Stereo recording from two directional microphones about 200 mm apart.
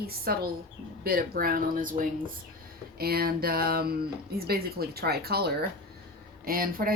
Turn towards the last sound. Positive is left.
turn(degrees=-45)  # may be behind; listen again after turning